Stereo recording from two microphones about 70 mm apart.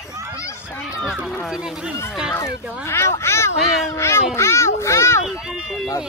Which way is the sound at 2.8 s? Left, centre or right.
Left.